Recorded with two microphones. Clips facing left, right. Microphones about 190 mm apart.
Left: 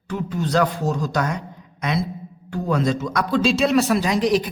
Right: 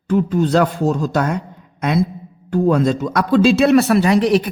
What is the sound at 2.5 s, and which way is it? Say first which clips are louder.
A man's voice: right 6 dB; 50° right (ahead or behind).